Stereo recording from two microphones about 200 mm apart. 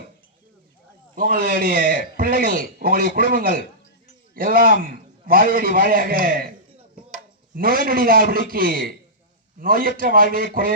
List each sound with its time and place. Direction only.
1.1 s a man's voice: 45° right (ahead or behind)
7.5 s a man's voice: 45° right (ahead or behind)